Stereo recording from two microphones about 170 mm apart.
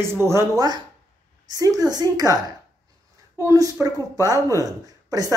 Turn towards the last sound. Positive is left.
turn(degrees=-20)  # may be behind; listen again after turning